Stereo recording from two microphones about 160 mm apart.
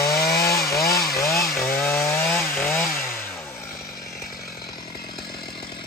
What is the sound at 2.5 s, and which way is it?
Chainsaw, centre (ahead or behind).